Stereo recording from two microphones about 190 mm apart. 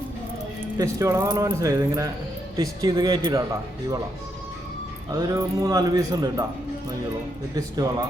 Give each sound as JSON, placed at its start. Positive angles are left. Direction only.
{"t": 0.6, "sound": "speech", "side_deg": -15}
{"t": 5.1, "sound": "speech", "side_deg": -20}
{"t": 7.5, "sound": "speech", "side_deg": -20}